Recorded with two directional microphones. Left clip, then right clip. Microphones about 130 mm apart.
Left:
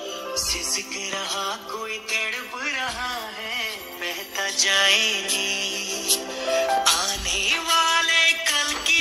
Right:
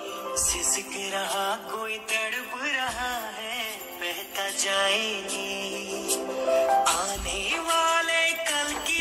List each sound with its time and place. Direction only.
0.4 s music: 40° right (ahead or behind)
1.1 s music: 55° right (ahead or behind)
2.0 s music: 45° right (ahead or behind); by 5.6 s 20° right (ahead or behind)
5.6 s music: 35° right (ahead or behind); by 8.7 s 55° right (ahead or behind)